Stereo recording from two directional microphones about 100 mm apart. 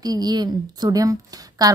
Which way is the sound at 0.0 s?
40° right (ahead or behind).